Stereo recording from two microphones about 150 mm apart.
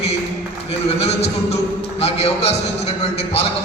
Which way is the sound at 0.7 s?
45° left (ahead or behind).